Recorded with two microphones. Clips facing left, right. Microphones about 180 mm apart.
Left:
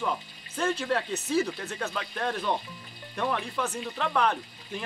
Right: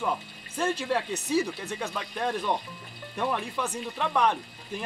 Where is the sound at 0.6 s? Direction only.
10° right (ahead or behind).